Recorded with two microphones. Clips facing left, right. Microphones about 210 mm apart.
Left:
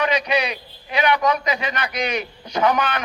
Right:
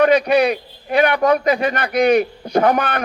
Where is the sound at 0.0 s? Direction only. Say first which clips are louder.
Right 8 dB; 55° right (ahead or behind).